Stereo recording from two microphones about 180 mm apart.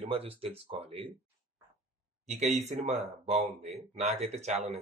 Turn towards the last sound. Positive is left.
turn(degrees=-40)  # may be behind; listen again after turning